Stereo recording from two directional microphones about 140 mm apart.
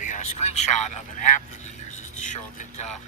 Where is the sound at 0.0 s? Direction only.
60° left (ahead or behind).